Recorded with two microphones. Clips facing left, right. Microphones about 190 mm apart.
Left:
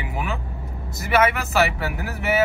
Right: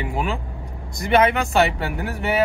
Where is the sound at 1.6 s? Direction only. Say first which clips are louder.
Right 1 dB; 30° right (ahead or behind).